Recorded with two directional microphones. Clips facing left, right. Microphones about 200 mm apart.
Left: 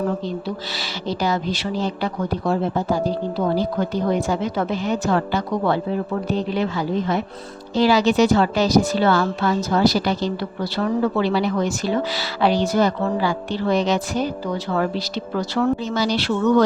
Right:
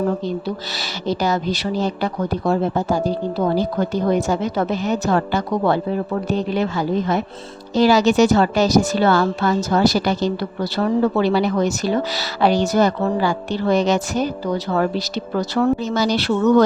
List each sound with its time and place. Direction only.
0.7 s a woman's voice: 45° right (ahead or behind)
4.3 s a woman's voice: 40° right (ahead or behind)